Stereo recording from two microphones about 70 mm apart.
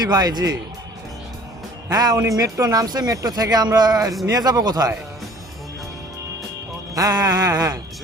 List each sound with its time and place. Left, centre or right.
0.0 s music: right
1.9 s music: right
2.2 s speech: right
4.3 s music: right
6.9 s music: right